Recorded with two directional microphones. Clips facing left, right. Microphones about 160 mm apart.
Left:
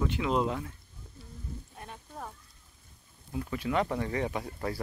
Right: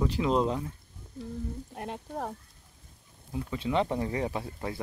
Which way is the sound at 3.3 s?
25° right (ahead or behind).